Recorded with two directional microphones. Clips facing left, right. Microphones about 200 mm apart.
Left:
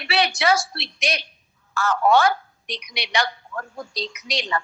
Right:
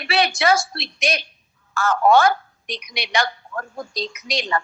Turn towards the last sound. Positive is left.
turn(degrees=-45)  # may be behind; listen again after turning